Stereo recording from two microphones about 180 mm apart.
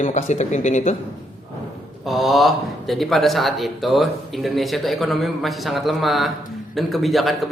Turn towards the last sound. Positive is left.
turn(degrees=0)  # may be behind; listen again after turning